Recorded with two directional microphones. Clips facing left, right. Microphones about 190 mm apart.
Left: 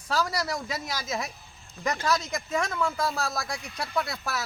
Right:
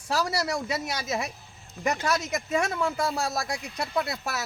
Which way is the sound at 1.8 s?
25° right (ahead or behind).